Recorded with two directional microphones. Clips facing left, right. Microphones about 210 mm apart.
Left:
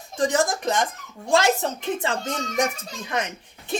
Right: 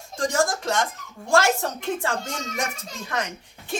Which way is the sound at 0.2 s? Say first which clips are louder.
Left 2 dB; 20° left (ahead or behind).